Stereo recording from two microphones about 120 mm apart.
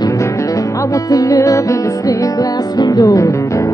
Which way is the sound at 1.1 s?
30° left (ahead or behind).